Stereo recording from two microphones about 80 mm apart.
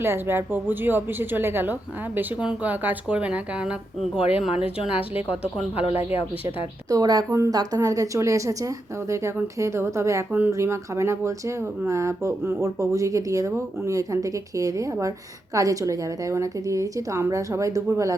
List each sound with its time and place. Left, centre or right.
0.0 s a woman's voice: right
6.9 s a woman's voice: right
7.3 s speech: right